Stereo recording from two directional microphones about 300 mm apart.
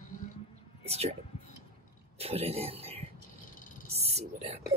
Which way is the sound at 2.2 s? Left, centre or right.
Centre.